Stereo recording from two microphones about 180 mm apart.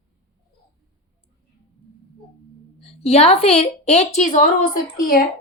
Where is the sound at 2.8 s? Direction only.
35° left (ahead or behind).